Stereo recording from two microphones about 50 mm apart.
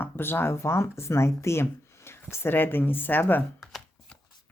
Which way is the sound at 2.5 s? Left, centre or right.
Left.